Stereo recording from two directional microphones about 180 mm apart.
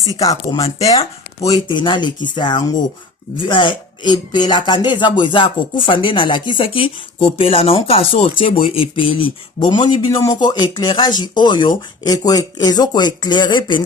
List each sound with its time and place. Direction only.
0.2 s speech: 20° left (ahead or behind)